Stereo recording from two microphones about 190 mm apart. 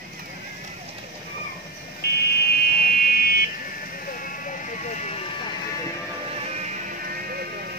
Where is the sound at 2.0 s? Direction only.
55° left (ahead or behind); by 5.2 s 35° left (ahead or behind).